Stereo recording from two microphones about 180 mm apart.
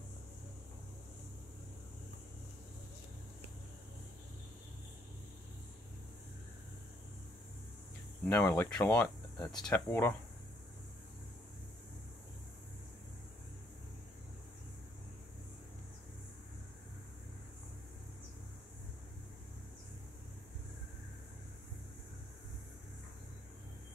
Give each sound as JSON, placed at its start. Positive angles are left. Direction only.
{"t": 8.3, "sound": "speech", "side_deg": 10}